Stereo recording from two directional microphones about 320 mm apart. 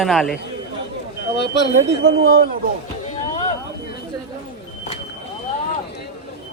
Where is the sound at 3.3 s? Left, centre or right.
Centre.